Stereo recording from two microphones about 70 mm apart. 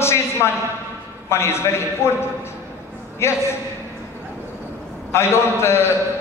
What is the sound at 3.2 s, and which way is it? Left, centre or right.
Speech, left.